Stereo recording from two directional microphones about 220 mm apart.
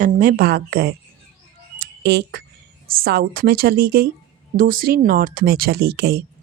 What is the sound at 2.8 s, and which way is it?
Speech, 45° right (ahead or behind).